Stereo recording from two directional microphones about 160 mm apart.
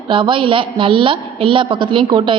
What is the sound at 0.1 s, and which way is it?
A woman's voice, 30° right (ahead or behind).